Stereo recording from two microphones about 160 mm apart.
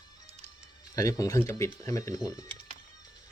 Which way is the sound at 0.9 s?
20° left (ahead or behind).